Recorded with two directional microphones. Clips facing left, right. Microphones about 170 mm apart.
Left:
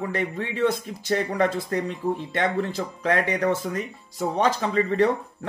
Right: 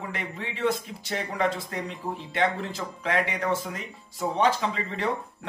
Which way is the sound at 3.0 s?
40° left (ahead or behind).